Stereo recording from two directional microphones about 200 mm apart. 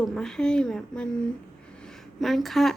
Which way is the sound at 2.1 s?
Centre (ahead or behind).